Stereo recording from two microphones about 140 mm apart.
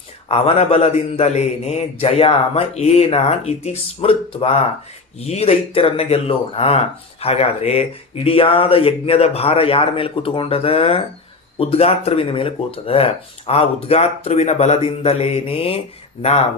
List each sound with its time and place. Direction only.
0.3 s speech: 45° left (ahead or behind)